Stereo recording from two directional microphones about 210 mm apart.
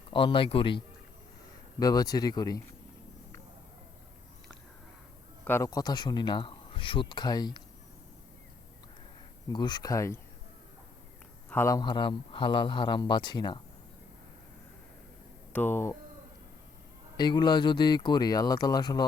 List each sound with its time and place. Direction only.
0.1 s speech: 25° left (ahead or behind)
1.8 s speech: 15° left (ahead or behind)
5.5 s speech: 15° left (ahead or behind)
9.5 s speech: 20° left (ahead or behind)
11.4 s speech: 10° left (ahead or behind)
15.5 s speech: 10° left (ahead or behind)
17.2 s speech: 20° left (ahead or behind)